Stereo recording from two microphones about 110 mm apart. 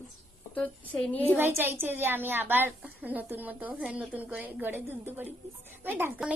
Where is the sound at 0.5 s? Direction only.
15° left (ahead or behind).